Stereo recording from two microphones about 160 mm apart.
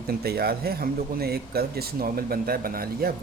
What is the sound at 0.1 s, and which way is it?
Speech, 80° right.